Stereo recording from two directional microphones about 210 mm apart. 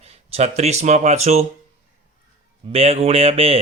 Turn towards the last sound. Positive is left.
turn(degrees=-30)  # may be behind; listen again after turning